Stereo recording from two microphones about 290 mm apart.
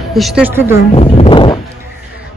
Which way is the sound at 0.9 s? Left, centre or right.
Centre.